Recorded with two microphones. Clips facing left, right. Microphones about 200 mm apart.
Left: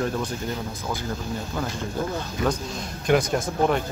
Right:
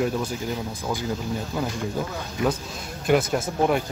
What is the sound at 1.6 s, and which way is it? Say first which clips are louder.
Speech: right 2 dB; 10° right (ahead or behind).